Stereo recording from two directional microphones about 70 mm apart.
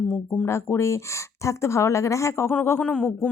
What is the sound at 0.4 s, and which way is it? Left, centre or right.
A woman's voice, left.